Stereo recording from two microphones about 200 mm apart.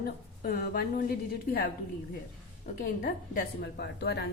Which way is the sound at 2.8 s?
50° left (ahead or behind).